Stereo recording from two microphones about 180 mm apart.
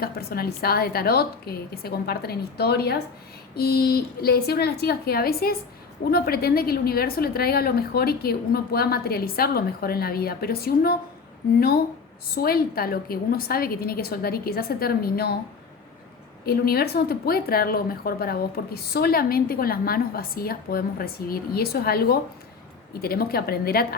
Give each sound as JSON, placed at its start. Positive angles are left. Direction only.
{"t": 0.0, "sound": "a woman's voice", "side_deg": 55}
{"t": 12.3, "sound": "a woman's voice", "side_deg": 55}
{"t": 16.5, "sound": "a woman's voice", "side_deg": 60}